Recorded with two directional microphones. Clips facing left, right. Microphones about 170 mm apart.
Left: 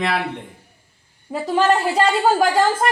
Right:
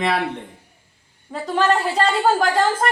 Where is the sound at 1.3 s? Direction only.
10° left (ahead or behind).